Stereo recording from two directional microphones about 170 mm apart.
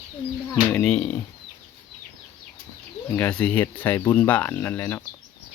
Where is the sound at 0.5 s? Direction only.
5° left (ahead or behind).